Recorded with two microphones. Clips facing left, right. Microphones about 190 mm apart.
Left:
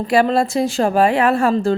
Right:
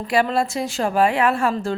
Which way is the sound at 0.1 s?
35° left (ahead or behind).